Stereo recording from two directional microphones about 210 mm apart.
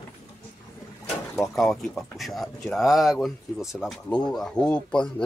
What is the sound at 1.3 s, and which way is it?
Speech, 10° left (ahead or behind).